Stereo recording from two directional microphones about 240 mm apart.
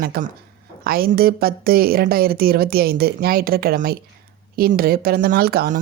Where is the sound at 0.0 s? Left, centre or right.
Right.